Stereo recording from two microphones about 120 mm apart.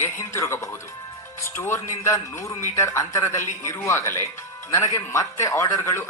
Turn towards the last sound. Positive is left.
turn(degrees=20)  # may be behind; listen again after turning